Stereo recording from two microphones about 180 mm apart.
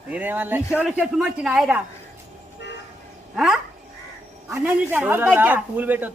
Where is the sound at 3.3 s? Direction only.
5° right (ahead or behind).